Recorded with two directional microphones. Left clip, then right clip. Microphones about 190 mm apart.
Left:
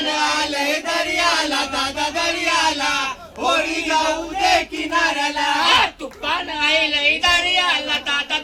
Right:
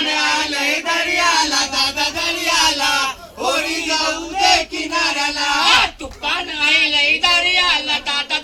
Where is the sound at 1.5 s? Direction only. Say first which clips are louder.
Right 3 dB; 50° right (ahead or behind).